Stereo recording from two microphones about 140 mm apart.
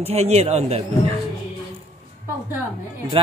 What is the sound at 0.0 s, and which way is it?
Speech, 50° right (ahead or behind).